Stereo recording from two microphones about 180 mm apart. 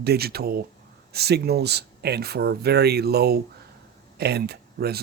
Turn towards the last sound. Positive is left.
turn(degrees=-60)  # may be behind; listen again after turning